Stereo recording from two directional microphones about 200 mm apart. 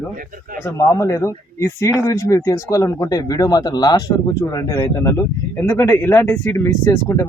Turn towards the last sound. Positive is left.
turn(degrees=15)  # may be behind; listen again after turning